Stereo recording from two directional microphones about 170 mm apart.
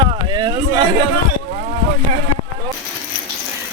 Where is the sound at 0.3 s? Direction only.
30° right (ahead or behind).